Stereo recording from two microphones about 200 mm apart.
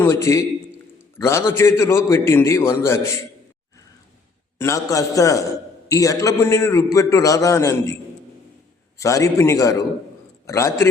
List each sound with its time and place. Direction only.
0.0 s a man's voice: 15° left (ahead or behind)
4.5 s a man's voice: 15° left (ahead or behind)
9.0 s a man's voice: 15° left (ahead or behind)